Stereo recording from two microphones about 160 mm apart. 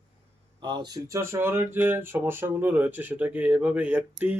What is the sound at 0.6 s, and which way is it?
Speech, 25° right (ahead or behind).